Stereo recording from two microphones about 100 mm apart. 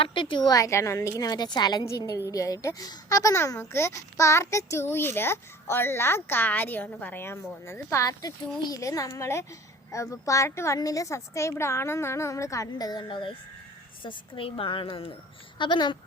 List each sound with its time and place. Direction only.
0.0 s a woman's voice: 55° left (ahead or behind)
0.5 s a woman's voice: 30° left (ahead or behind)
2.3 s a woman's voice: 35° left (ahead or behind); by 15.1 s 65° left (ahead or behind)
15.5 s speech: 55° left (ahead or behind)